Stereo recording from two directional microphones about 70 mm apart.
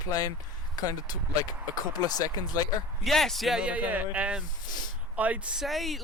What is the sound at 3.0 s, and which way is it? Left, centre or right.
Speech, centre.